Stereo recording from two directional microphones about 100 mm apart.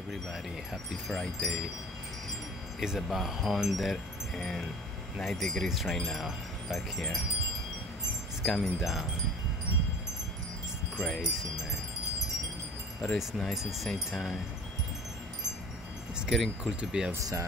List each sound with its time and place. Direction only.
1.0 s chime: 5° left (ahead or behind)
2.8 s chime: 5° right (ahead or behind)
8.5 s chime: centre (ahead or behind)
11.0 s chime: centre (ahead or behind)
13.0 s chime: centre (ahead or behind)
16.2 s chime: centre (ahead or behind)
17.1 s speech: 35° right (ahead or behind)